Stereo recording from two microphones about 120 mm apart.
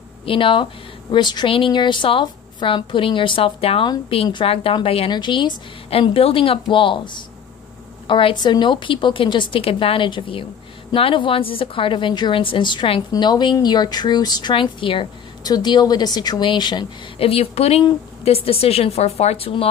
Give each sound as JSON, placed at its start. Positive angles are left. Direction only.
{"t": 0.2, "sound": "a woman's voice", "side_deg": 45}
{"t": 5.1, "sound": "speech", "side_deg": 40}
{"t": 5.9, "sound": "a woman's voice", "side_deg": 55}
{"t": 15.4, "sound": "speech", "side_deg": 35}
{"t": 17.2, "sound": "a woman's voice", "side_deg": 55}